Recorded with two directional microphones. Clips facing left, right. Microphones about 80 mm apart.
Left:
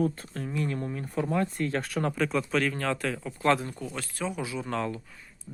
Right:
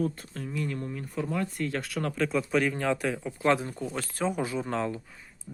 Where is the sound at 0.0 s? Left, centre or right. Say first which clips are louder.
Left 2 dB; left.